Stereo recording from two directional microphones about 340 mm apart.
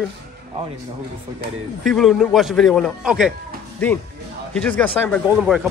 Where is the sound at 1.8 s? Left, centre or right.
Centre.